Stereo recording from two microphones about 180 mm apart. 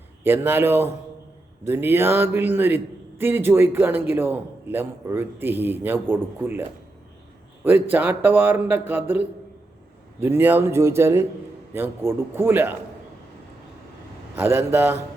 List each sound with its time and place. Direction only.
0.2 s a man's voice: 10° right (ahead or behind)
14.3 s a man's voice: 15° right (ahead or behind)